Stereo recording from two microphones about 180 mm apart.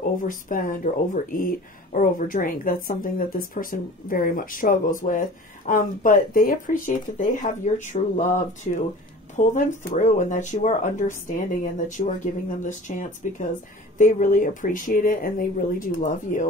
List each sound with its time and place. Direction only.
0.0 s speech: 50° left (ahead or behind)